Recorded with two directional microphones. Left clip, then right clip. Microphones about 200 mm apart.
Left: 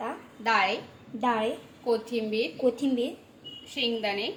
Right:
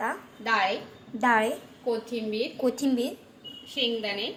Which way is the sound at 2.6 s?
5° right (ahead or behind).